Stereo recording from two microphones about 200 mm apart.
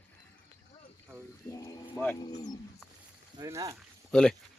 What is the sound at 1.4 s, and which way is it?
Speech, 15° left (ahead or behind).